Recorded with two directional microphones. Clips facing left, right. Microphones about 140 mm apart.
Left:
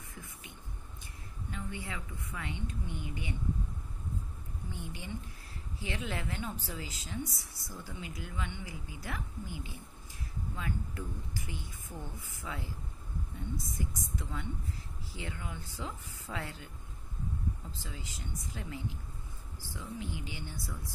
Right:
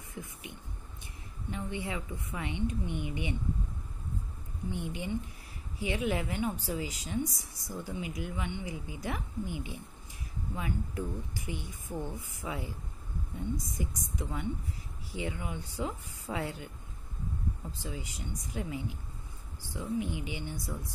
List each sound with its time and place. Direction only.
0.1 s speech: 20° right (ahead or behind)
1.5 s speech: 20° right (ahead or behind)
4.6 s speech: 20° right (ahead or behind)
13.7 s speech: 15° right (ahead or behind)
17.8 s speech: 15° right (ahead or behind)